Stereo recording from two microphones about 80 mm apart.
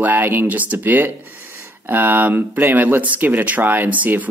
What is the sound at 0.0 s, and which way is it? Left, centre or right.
Speech, right.